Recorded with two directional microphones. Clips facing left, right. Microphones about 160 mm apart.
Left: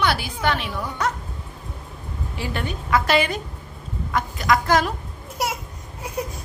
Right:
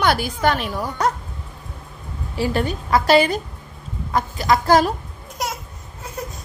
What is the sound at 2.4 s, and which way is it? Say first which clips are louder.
A woman's voice: right 8 dB; 35° right (ahead or behind).